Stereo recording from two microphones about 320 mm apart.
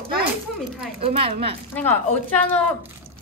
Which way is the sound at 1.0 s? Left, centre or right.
Centre.